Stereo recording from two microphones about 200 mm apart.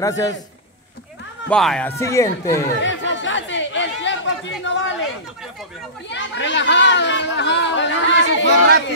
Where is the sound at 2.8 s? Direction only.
65° left (ahead or behind).